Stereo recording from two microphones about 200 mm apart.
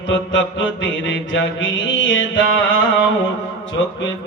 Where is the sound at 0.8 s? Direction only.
65° left (ahead or behind).